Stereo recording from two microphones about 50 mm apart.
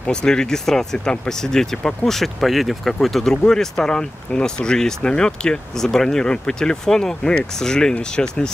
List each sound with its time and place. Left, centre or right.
0.0 s speech: centre